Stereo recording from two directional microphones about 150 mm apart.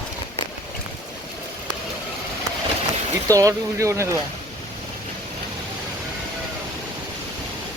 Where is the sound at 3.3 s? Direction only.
20° right (ahead or behind).